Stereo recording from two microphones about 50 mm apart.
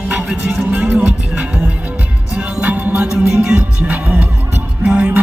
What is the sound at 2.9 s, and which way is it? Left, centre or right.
Music, centre.